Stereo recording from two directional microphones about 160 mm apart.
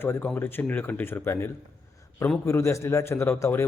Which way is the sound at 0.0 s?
15° left (ahead or behind).